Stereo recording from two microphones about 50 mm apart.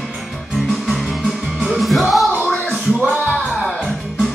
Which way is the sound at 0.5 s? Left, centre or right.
Centre.